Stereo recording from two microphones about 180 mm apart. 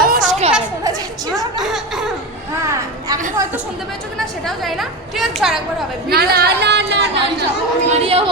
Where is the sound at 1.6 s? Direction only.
Centre (ahead or behind).